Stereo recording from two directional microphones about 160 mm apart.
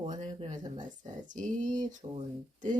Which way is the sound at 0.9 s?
55° right (ahead or behind).